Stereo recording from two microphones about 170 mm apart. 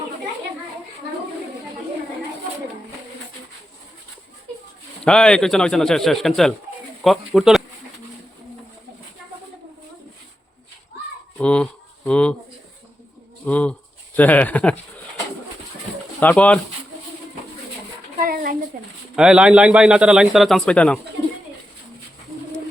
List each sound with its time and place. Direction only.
5.0 s speech: 5° left (ahead or behind)
11.3 s insect: 5° left (ahead or behind)
13.4 s a sound: 5° left (ahead or behind)
14.2 s speech: 10° left (ahead or behind)
16.2 s speech: 10° left (ahead or behind)
18.3 s a sound: 60° right (ahead or behind)
19.1 s speech: 5° right (ahead or behind)